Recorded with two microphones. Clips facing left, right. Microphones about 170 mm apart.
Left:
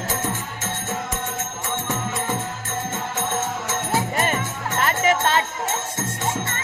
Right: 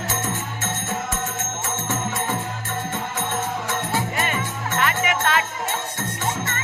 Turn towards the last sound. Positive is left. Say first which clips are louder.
# left 2 dB
turn(degrees=30)  # may be behind; listen again after turning